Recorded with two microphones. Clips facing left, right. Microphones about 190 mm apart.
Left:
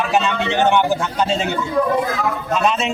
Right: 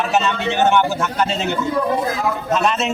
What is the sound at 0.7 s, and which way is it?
Speech, 15° left (ahead or behind).